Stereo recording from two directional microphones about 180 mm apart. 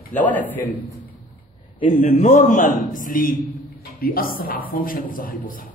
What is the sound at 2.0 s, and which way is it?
A man's voice, 40° left (ahead or behind).